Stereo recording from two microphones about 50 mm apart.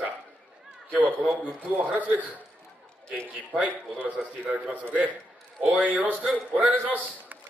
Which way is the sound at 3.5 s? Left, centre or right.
Right.